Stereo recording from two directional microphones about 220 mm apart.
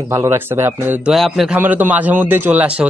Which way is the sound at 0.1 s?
10° right (ahead or behind).